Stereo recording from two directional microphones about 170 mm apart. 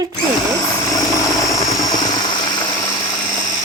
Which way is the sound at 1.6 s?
25° left (ahead or behind).